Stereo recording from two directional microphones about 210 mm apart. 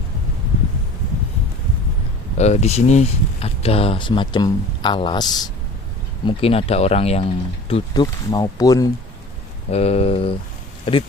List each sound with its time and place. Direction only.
2.4 s speech: 30° left (ahead or behind)
7.7 s speech: 20° left (ahead or behind)
9.6 s speech: 30° left (ahead or behind)